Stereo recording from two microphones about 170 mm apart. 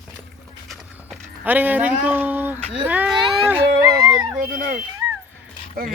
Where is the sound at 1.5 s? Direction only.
10° right (ahead or behind).